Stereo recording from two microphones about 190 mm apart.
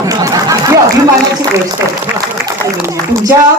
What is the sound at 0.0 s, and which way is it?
Chatter, 15° right (ahead or behind).